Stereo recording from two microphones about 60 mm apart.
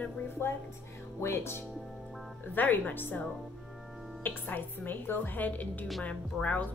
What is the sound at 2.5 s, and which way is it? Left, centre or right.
Speech, left.